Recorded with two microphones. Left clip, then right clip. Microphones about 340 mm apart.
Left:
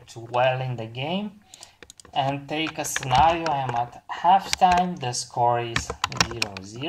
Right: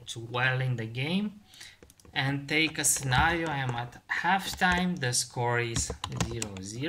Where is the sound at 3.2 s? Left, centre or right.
Right.